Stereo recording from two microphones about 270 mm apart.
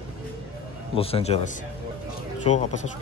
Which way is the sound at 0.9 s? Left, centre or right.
Left.